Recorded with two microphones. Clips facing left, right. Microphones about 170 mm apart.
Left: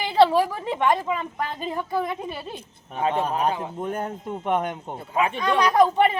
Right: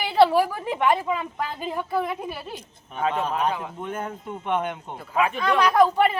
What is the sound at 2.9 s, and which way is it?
A man's voice, 35° left (ahead or behind).